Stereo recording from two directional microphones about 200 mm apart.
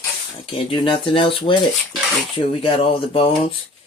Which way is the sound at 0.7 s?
25° left (ahead or behind).